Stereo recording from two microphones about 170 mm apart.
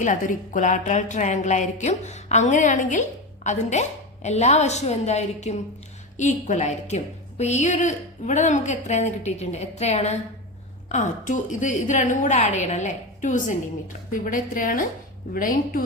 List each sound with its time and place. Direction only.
0.0 s a woman's voice: 50° left (ahead or behind)